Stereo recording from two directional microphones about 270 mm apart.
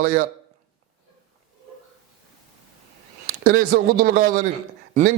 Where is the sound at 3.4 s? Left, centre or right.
Right.